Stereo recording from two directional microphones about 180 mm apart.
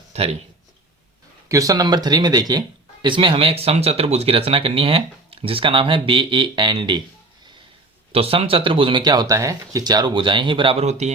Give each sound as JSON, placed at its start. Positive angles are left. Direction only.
{"t": 0.1, "sound": "speech", "side_deg": -35}
{"t": 1.5, "sound": "speech", "side_deg": -20}
{"t": 8.1, "sound": "speech", "side_deg": -30}